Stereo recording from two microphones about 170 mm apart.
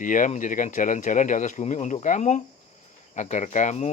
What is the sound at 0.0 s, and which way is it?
Speech, 50° left (ahead or behind).